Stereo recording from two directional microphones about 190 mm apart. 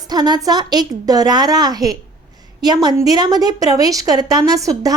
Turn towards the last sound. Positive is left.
turn(degrees=-20)  # may be behind; listen again after turning